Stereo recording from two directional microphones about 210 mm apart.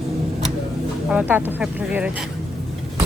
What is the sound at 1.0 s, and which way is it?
Speech, 5° right (ahead or behind).